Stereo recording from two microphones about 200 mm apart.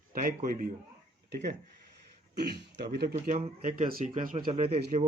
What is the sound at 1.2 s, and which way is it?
Speech, 50° right (ahead or behind).